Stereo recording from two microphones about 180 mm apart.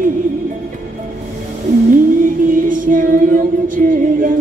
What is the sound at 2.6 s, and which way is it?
Child singing, 50° right (ahead or behind).